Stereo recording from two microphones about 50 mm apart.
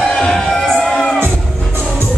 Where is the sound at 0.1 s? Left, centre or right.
Centre.